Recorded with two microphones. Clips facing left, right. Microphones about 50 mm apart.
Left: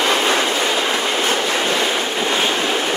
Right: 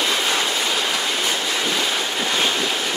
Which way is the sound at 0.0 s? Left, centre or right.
Left.